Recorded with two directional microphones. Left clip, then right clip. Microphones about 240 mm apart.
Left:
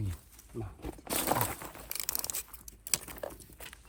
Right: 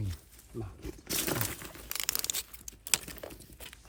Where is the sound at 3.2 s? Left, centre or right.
Centre.